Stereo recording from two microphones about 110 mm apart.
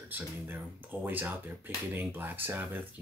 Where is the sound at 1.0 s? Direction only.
20° right (ahead or behind).